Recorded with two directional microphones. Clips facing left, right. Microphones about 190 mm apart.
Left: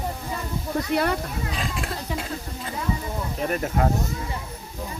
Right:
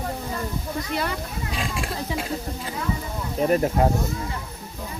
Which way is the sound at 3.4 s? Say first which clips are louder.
Right 5 dB; 30° right (ahead or behind).